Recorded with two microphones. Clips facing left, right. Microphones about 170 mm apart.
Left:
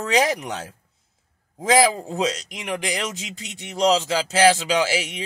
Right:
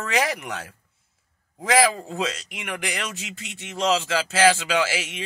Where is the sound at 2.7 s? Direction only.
15° left (ahead or behind).